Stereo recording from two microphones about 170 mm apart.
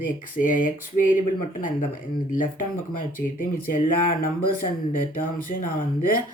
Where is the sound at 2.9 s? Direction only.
50° left (ahead or behind).